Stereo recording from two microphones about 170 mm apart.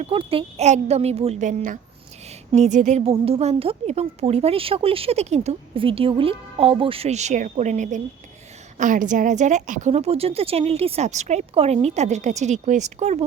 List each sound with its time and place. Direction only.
0.0 s a woman's voice: 35° right (ahead or behind)